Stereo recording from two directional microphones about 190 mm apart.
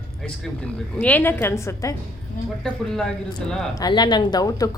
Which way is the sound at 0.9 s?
10° left (ahead or behind).